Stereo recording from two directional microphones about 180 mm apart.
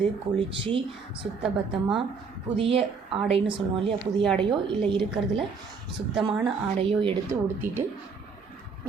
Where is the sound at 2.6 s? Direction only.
30° right (ahead or behind).